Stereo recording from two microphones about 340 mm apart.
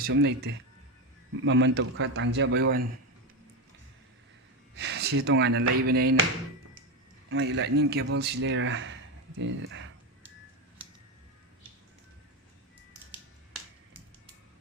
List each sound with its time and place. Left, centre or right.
0.0 s a man's voice: right
4.8 s a man's voice: right
7.3 s a man's voice: right
13.1 s finger snapping: centre